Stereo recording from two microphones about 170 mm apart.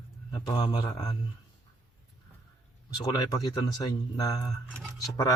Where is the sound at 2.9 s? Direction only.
25° left (ahead or behind).